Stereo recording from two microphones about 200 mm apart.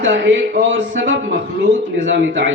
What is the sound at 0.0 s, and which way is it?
A man's voice, 70° right (ahead or behind).